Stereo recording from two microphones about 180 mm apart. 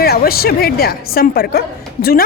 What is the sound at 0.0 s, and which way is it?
A woman's voice, 60° left (ahead or behind).